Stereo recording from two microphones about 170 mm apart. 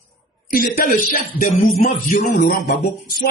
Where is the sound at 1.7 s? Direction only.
40° left (ahead or behind).